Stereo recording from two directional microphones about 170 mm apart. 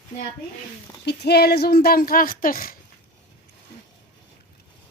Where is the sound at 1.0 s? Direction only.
80° left; by 2.7 s 55° left (ahead or behind).